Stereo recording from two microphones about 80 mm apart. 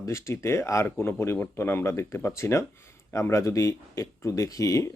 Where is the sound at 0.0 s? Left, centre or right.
Left.